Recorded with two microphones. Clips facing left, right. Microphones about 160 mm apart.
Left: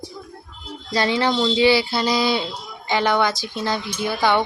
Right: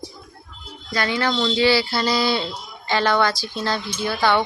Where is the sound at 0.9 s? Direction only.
30° left (ahead or behind).